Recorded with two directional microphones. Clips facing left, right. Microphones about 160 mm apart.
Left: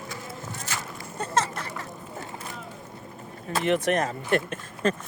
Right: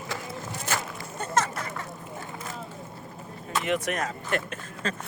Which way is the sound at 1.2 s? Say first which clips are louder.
Even; 30° left (ahead or behind).